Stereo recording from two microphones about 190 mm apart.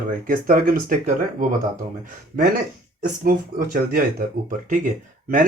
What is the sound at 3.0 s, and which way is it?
Speech, 50° right (ahead or behind).